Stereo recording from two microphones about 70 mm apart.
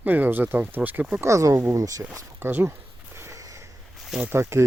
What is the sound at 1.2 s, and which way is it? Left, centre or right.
Speech, right.